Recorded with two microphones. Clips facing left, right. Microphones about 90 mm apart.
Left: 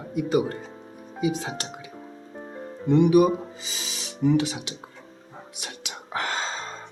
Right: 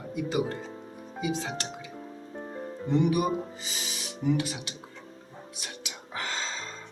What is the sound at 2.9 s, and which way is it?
Speech, 75° left (ahead or behind).